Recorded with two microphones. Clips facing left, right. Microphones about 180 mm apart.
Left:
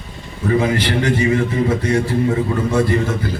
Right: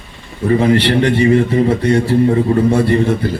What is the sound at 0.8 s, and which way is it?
A man's voice, 30° right (ahead or behind).